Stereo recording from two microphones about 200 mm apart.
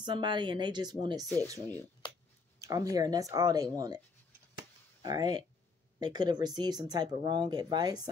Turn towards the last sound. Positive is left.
turn(degrees=-20)  # may be behind; listen again after turning